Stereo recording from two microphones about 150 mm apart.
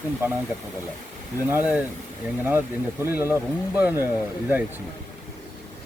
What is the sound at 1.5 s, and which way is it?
Speech, 10° right (ahead or behind).